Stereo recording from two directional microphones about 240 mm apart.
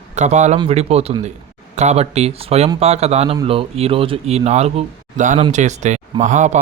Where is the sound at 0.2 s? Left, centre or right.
Right.